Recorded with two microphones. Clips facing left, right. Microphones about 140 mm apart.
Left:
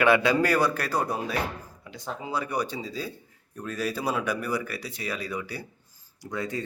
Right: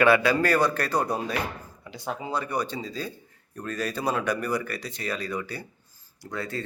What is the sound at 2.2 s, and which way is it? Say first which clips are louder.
Speech: even; 5° left (ahead or behind).